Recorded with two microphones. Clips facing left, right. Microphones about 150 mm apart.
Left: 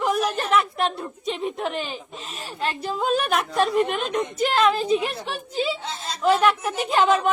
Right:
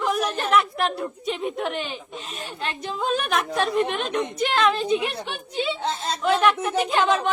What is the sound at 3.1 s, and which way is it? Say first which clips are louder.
Speech: left 1 dB; 35° left (ahead or behind).